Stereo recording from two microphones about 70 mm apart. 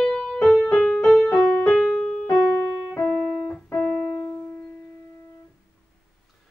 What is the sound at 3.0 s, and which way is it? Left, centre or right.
Keyboard, centre.